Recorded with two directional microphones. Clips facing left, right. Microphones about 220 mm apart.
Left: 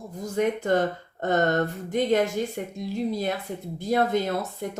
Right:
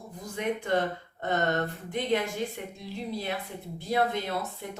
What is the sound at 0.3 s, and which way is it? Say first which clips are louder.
A woman's voice: left 5 dB; 45° left (ahead or behind).